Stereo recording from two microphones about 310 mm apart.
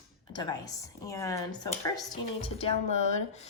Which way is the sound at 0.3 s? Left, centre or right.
Centre.